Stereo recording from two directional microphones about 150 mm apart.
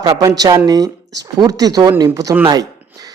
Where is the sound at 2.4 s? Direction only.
25° right (ahead or behind).